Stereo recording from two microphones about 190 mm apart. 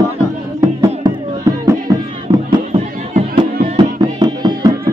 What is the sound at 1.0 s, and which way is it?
Music, 20° right (ahead or behind).